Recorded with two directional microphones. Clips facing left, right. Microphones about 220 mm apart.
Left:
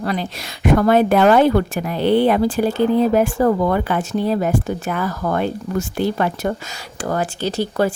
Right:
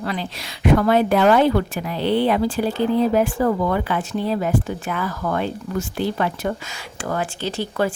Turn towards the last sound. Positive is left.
turn(degrees=40)  # may be behind; listen again after turning